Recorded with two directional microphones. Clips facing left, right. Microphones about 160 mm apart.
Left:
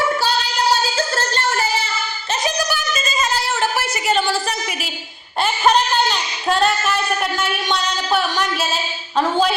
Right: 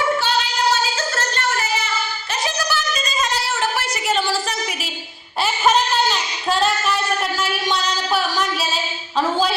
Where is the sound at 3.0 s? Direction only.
Centre (ahead or behind).